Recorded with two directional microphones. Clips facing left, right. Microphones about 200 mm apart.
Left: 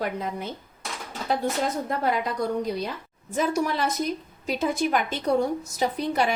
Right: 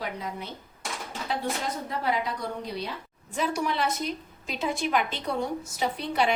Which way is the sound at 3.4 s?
45° left (ahead or behind).